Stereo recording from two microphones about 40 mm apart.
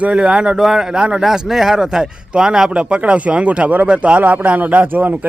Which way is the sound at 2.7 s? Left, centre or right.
Right.